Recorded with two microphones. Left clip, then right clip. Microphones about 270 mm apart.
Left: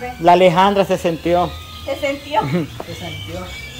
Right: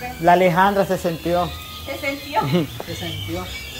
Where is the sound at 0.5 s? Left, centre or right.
Centre.